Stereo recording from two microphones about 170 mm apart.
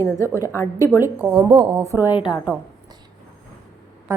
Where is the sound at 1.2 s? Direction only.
15° right (ahead or behind).